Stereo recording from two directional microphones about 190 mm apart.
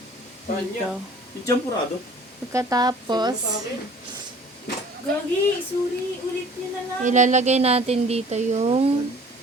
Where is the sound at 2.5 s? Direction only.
20° right (ahead or behind).